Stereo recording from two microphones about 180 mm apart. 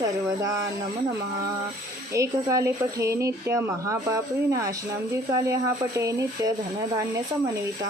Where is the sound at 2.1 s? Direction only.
15° right (ahead or behind).